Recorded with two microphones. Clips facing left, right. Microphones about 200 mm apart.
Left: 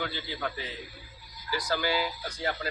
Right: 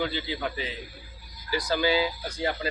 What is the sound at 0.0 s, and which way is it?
Speech, 20° right (ahead or behind).